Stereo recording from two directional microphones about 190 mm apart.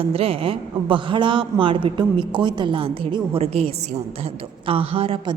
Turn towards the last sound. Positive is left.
turn(degrees=-25)  # may be behind; listen again after turning